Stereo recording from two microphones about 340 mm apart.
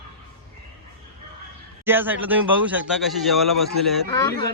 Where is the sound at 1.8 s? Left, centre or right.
Centre.